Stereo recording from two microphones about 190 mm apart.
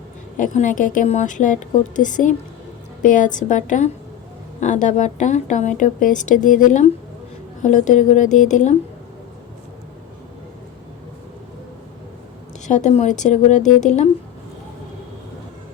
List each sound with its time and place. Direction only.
0.3 s a woman's voice: 40° left (ahead or behind)
12.6 s a woman's voice: 40° left (ahead or behind)